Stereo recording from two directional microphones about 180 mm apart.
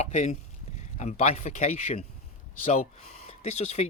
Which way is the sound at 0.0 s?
40° left (ahead or behind).